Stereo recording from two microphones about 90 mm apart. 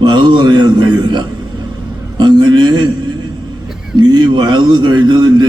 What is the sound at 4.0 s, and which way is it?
A man's voice, 55° right (ahead or behind).